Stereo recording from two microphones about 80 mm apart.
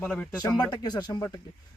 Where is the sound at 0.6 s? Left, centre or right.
Left.